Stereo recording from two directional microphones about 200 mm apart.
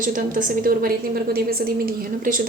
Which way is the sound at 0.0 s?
40° right (ahead or behind).